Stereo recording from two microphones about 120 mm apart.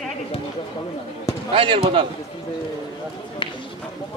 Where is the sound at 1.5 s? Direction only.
45° right (ahead or behind).